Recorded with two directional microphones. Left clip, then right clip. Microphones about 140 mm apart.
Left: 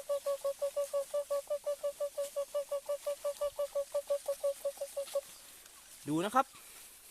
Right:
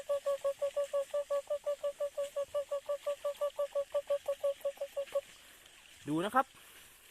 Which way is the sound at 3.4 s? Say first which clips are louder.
Right 1 dB; 15° left (ahead or behind).